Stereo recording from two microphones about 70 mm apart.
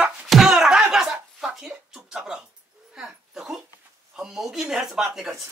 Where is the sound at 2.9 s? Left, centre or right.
Centre.